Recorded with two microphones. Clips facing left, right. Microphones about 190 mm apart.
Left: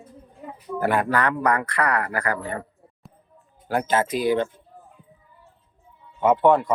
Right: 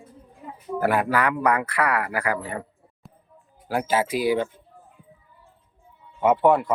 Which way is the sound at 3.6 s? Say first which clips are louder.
Left 1 dB; 5° right (ahead or behind).